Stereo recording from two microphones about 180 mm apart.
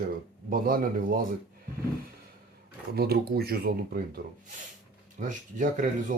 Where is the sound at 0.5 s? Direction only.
55° right (ahead or behind).